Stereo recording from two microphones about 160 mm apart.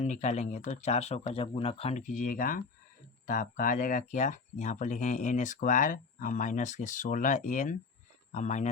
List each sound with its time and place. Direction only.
0.0 s speech: 45° left (ahead or behind)
2.0 s speech: 60° left (ahead or behind)